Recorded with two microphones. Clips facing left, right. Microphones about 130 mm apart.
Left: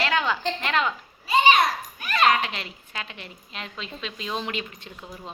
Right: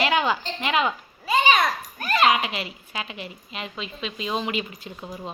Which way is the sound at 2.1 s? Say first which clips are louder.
Right 1 dB; 5° right (ahead or behind).